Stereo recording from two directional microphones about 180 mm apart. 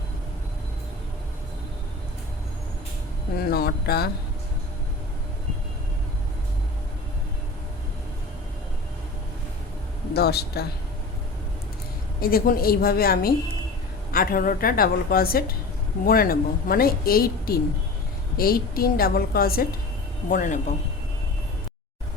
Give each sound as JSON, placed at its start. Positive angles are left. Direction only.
{"t": 3.3, "sound": "speech", "side_deg": 55}
{"t": 10.2, "sound": "a woman's voice", "side_deg": 60}
{"t": 12.2, "sound": "a woman's voice", "side_deg": 55}
{"t": 20.3, "sound": "a woman's voice", "side_deg": 45}